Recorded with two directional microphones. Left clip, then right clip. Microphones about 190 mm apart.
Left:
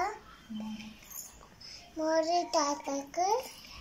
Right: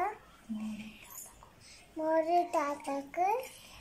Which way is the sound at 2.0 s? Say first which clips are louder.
Even; 5° right (ahead or behind).